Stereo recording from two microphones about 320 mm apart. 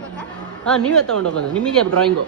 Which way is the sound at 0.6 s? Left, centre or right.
Centre.